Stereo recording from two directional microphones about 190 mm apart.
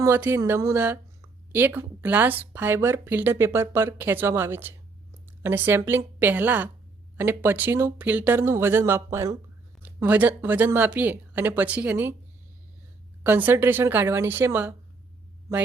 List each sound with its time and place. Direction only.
0.0 s speech: 15° right (ahead or behind)
13.2 s speech: 10° right (ahead or behind)